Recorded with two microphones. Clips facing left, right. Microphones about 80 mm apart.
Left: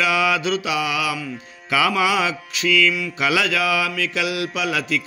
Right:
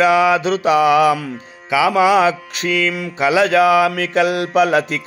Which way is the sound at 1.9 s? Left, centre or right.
Right.